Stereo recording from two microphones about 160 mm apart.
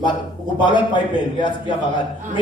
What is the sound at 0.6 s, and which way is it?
Speech, 30° left (ahead or behind).